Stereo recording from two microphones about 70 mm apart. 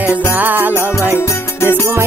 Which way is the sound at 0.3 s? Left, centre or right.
Right.